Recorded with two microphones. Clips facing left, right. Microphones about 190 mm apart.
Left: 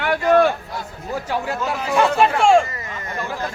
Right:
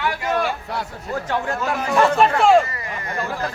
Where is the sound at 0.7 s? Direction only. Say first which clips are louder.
Right 3 dB; 70° right (ahead or behind).